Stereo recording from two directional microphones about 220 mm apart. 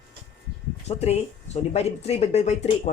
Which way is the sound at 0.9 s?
30° left (ahead or behind).